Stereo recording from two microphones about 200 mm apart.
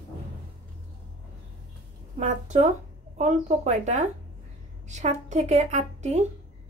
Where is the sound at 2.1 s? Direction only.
35° right (ahead or behind).